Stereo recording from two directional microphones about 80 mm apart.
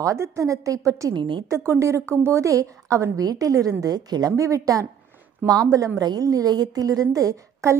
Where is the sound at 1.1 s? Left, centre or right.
Right.